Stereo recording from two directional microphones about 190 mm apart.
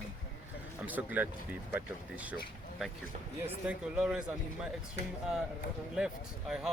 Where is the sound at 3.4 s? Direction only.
5° right (ahead or behind).